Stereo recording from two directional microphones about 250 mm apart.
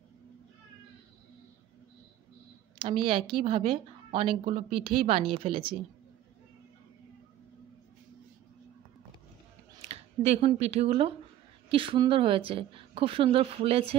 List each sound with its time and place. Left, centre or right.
2.8 s a woman's voice: right
9.8 s a woman's voice: right